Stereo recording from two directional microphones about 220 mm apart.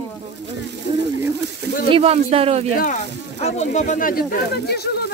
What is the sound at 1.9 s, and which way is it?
Speech, 25° right (ahead or behind).